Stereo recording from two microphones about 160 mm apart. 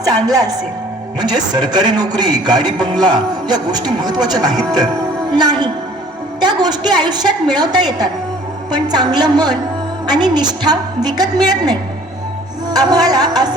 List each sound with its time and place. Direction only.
0.0 s a man's voice: 25° right (ahead or behind)